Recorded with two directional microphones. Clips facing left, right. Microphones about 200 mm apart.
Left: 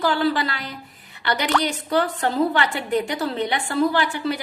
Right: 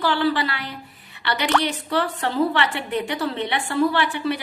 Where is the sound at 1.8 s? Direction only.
45° left (ahead or behind).